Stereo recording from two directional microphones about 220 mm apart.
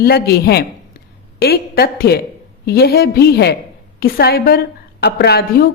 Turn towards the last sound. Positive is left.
turn(degrees=45)  # may be behind; listen again after turning